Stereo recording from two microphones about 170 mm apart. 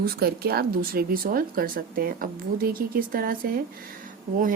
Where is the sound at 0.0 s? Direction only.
65° right (ahead or behind).